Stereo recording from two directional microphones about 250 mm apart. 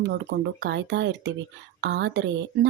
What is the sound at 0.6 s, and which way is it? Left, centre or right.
Speech, right.